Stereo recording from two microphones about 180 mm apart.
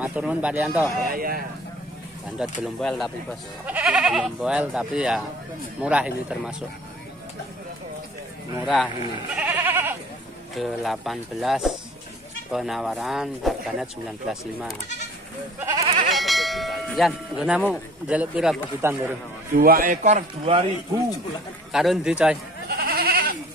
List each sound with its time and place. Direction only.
0.0 s speech: 10° right (ahead or behind)
1.1 s speech: 55° right (ahead or behind)
2.6 s speech: centre (ahead or behind)
8.6 s speech: 5° right (ahead or behind)
10.5 s speech: centre (ahead or behind)
15.8 s goat: 35° right (ahead or behind)
16.1 s sheep: centre (ahead or behind)
18.0 s speech: 5° right (ahead or behind)
19.5 s a man's voice: 55° right (ahead or behind); by 20.6 s 35° right (ahead or behind)
21.7 s speech: centre (ahead or behind)
22.7 s goat: 60° right (ahead or behind)